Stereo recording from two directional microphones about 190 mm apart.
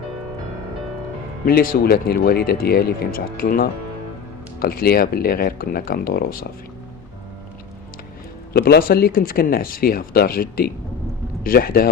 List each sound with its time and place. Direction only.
1.5 s speech: 55° left (ahead or behind)
8.5 s speech: 55° left (ahead or behind)